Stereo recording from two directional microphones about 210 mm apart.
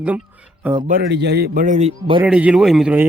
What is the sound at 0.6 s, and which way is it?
Speech, 15° right (ahead or behind).